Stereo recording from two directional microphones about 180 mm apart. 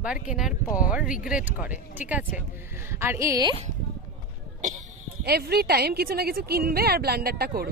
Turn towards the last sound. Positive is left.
turn(degrees=-60)  # may be behind; listen again after turning